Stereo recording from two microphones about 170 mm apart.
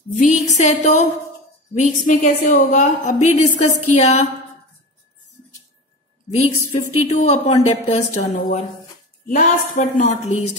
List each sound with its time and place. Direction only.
0.2 s a woman's voice: 45° left (ahead or behind)
6.3 s a woman's voice: 40° left (ahead or behind)